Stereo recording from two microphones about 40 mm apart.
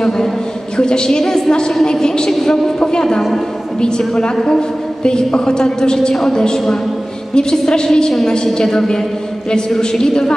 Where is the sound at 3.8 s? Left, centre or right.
Centre.